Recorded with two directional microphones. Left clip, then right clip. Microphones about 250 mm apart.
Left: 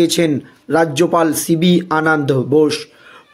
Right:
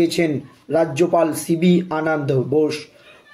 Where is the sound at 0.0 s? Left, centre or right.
Left.